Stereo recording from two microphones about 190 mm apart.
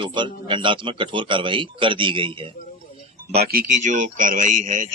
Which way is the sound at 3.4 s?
50° right (ahead or behind).